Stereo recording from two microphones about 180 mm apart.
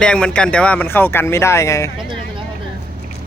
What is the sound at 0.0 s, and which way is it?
Speech, 5° left (ahead or behind).